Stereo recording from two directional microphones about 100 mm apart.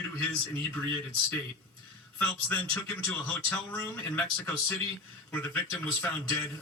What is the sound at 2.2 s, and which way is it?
Speech, 20° left (ahead or behind).